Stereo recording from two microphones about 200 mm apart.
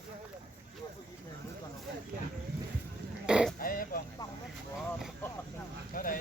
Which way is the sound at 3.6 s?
45° left (ahead or behind).